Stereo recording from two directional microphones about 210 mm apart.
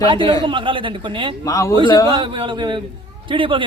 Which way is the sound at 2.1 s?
25° right (ahead or behind).